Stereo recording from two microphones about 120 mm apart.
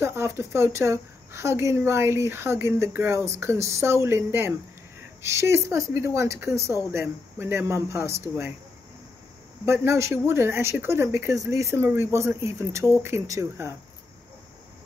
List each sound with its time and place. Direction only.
0.0 s a woman's voice: 20° right (ahead or behind)
9.7 s a woman's voice: 25° right (ahead or behind)